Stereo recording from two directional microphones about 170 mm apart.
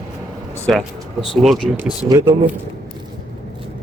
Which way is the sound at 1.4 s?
Centre (ahead or behind).